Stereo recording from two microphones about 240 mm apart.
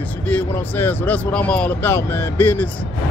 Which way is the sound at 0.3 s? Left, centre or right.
Centre.